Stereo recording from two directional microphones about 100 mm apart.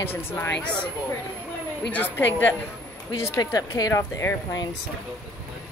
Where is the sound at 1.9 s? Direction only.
15° left (ahead or behind).